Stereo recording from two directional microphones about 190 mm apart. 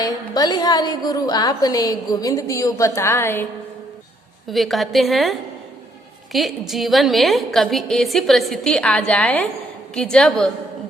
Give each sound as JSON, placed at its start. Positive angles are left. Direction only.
{"t": 0.0, "sound": "a woman's voice", "side_deg": 20}
{"t": 4.4, "sound": "a woman's voice", "side_deg": 0}